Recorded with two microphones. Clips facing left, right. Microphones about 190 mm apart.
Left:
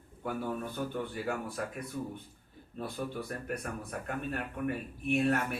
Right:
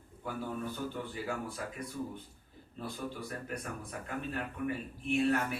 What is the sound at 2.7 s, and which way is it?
Speech, 55° left (ahead or behind).